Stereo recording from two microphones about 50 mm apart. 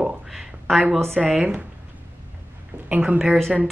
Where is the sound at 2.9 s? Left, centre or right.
Right.